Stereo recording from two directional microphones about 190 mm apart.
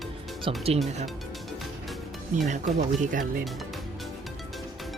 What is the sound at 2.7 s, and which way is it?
Speech, 40° right (ahead or behind).